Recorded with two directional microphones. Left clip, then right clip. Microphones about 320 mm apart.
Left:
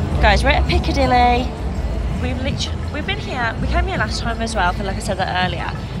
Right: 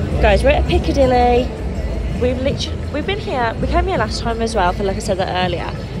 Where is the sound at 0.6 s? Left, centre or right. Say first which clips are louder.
Right 3 dB; left.